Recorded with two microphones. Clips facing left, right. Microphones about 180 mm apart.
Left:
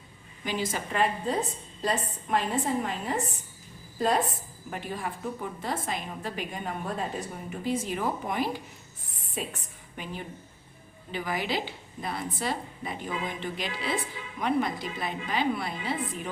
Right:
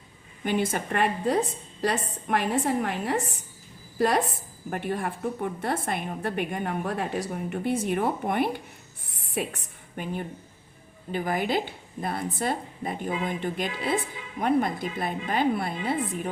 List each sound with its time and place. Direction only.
0.4 s a woman's voice: 55° right (ahead or behind)
4.7 s a woman's voice: 60° right (ahead or behind)
9.1 s a sound: 70° right (ahead or behind)
10.0 s a woman's voice: 50° right (ahead or behind)